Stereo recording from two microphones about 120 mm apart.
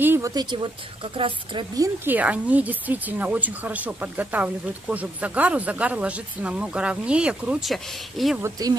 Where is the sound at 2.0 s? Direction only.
15° right (ahead or behind).